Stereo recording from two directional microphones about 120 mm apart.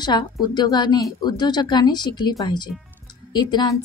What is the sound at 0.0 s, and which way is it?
A woman's voice, 35° left (ahead or behind).